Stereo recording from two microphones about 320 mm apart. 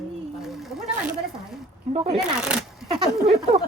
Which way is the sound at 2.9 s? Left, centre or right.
Centre.